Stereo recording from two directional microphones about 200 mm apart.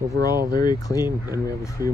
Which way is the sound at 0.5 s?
20° left (ahead or behind).